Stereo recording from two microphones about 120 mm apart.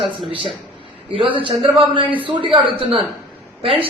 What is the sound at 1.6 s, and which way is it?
A man's voice, 45° right (ahead or behind).